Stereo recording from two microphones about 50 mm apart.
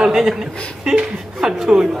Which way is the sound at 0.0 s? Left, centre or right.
Centre.